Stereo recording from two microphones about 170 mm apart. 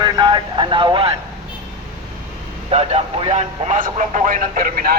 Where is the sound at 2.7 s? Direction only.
35° right (ahead or behind).